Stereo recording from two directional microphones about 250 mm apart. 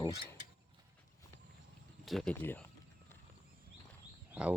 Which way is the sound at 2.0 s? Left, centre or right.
Centre.